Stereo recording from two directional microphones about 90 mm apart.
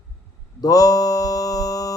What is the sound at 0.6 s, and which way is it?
Music, 40° left (ahead or behind).